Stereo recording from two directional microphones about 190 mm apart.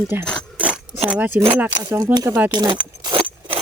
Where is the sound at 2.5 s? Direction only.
25° right (ahead or behind).